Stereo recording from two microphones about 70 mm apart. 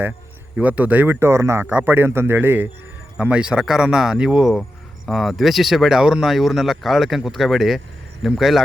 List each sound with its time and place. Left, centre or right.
0.5 s a man's voice: right
3.2 s speech: centre